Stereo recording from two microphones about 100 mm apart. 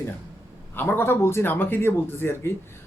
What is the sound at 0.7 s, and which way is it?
A man's voice, 20° left (ahead or behind).